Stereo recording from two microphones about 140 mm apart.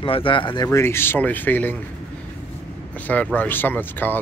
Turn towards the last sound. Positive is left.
turn(degrees=15)  # may be behind; listen again after turning